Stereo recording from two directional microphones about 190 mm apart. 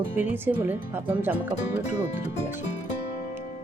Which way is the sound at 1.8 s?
35° left (ahead or behind).